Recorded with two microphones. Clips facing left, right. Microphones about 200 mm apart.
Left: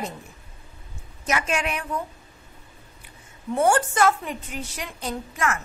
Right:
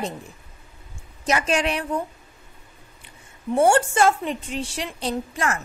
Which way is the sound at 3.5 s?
25° right (ahead or behind).